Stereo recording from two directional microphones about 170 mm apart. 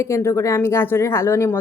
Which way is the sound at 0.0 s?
15° left (ahead or behind).